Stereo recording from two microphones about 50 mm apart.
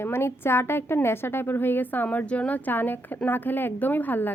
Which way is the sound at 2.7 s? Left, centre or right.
Left.